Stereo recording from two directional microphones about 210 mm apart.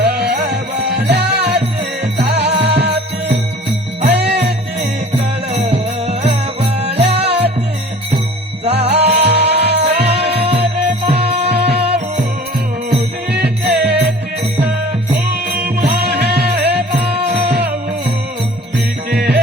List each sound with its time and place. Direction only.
0.0 s music: 50° right (ahead or behind)
4.1 s music: 50° right (ahead or behind)
5.7 s music: 30° right (ahead or behind)
8.7 s music: 50° right (ahead or behind)
9.8 s music: 30° right (ahead or behind)
11.4 s music: 50° right (ahead or behind)
13.3 s music: 50° right (ahead or behind)
15.8 s music: 50° right (ahead or behind)
19.1 s music: 50° right (ahead or behind)